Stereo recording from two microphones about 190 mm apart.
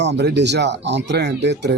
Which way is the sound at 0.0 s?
65° right (ahead or behind).